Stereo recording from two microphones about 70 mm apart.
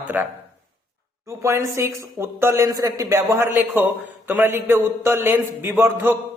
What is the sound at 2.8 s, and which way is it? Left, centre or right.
Speech, right.